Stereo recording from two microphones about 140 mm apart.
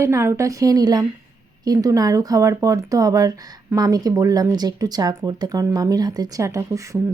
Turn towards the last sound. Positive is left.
turn(degrees=-20)  # may be behind; listen again after turning